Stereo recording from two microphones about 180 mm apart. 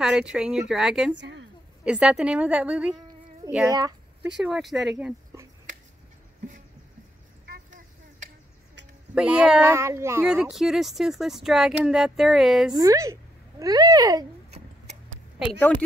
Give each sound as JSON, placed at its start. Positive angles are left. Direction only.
{"t": 0.0, "sound": "speech", "side_deg": -5}
{"t": 1.1, "sound": "a woman's voice", "side_deg": -75}
{"t": 1.9, "sound": "speech", "side_deg": -5}
{"t": 3.7, "sound": "a sound", "side_deg": -20}
{"t": 4.4, "sound": "speech", "side_deg": 0}
{"t": 4.9, "sound": "speech", "side_deg": -15}
{"t": 9.1, "sound": "speech", "side_deg": -5}
{"t": 12.7, "sound": "a child's voice", "side_deg": -20}